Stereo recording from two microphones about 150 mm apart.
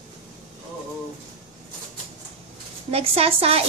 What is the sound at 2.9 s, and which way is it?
Speech, 40° right (ahead or behind).